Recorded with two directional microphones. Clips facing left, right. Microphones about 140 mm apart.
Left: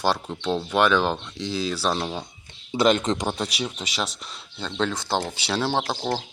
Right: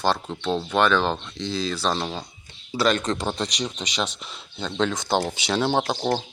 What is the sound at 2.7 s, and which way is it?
Speech, 20° left (ahead or behind).